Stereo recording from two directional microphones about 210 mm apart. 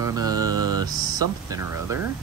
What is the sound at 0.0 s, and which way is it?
Mantra, 15° right (ahead or behind).